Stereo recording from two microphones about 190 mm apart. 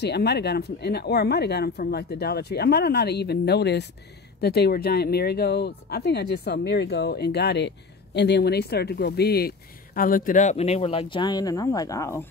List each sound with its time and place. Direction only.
0.0 s speech: 60° left (ahead or behind); by 12.3 s 15° left (ahead or behind)